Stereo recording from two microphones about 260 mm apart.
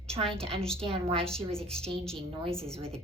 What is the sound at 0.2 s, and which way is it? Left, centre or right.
A woman's voice, centre.